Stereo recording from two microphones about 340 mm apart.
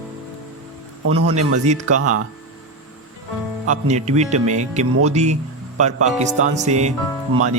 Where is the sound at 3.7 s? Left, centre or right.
Centre.